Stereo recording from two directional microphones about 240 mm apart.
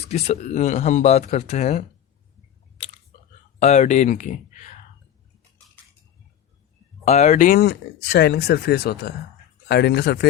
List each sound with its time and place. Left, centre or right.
0.1 s speech: left
3.6 s speech: left
7.0 s speech: left